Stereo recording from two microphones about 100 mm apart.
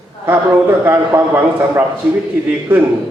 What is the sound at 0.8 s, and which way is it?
A man's voice, 25° right (ahead or behind).